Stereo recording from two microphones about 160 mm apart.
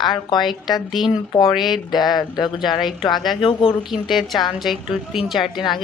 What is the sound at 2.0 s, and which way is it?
Speech, 25° left (ahead or behind).